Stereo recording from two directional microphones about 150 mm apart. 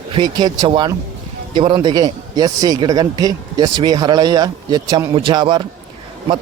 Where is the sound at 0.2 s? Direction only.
25° right (ahead or behind).